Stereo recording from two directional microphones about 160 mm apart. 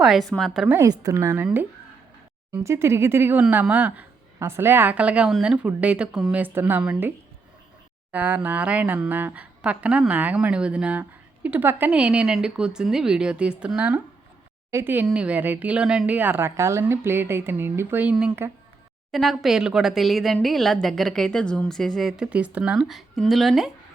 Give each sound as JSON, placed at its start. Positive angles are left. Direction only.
{"t": 0.0, "sound": "a woman's voice", "side_deg": 0}
{"t": 0.8, "sound": "a woman's voice", "side_deg": -20}
{"t": 2.5, "sound": "a woman's voice", "side_deg": -15}
{"t": 8.1, "sound": "a woman's voice", "side_deg": -10}
{"t": 19.1, "sound": "a woman's voice", "side_deg": 0}